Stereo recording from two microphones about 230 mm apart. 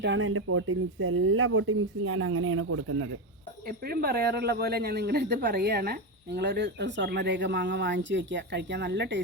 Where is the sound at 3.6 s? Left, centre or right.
Right.